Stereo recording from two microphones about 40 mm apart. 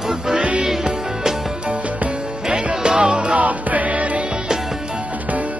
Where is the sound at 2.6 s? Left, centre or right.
Right.